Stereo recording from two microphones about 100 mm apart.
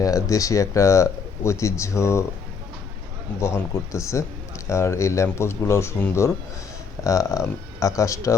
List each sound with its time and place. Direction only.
0.0 s speech: 35° left (ahead or behind)
3.4 s speech: 30° left (ahead or behind)